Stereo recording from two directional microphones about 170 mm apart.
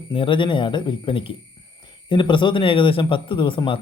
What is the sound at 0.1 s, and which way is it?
A man's voice, 30° left (ahead or behind).